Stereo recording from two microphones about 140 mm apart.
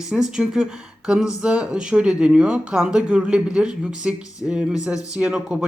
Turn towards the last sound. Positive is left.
turn(degrees=-5)  # may be behind; listen again after turning